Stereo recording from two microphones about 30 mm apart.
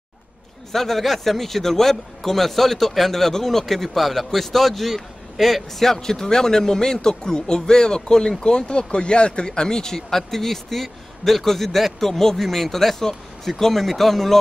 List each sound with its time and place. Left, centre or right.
0.7 s a man's voice: centre
5.9 s a man's voice: centre